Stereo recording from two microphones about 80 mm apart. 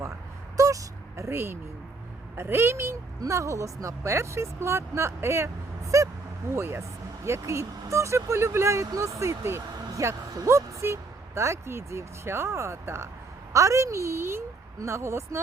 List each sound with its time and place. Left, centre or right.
0.5 s vehicle: right
2.3 s speech: right